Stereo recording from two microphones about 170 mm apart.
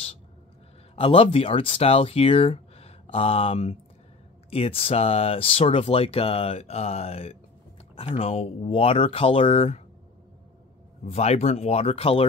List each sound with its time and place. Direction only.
0.9 s speech: 35° left (ahead or behind)
11.1 s speech: 40° left (ahead or behind)